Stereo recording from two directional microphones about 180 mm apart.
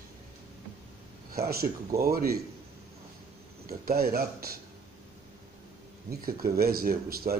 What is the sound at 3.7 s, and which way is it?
Speech, 55° right (ahead or behind).